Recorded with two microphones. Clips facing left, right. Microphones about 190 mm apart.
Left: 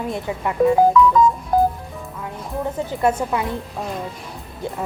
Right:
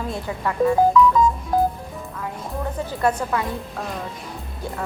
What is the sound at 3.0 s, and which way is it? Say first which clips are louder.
Speech: left 2 dB; 20° left (ahead or behind).